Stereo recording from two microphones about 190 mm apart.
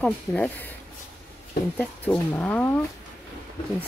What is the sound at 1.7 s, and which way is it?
Speech, 10° left (ahead or behind).